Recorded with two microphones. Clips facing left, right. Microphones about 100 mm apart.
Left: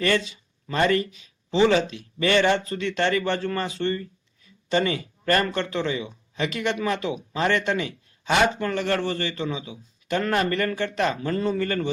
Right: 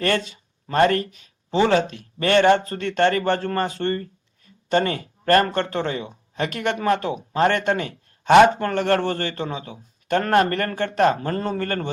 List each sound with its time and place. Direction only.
0.0 s speech: 50° right (ahead or behind)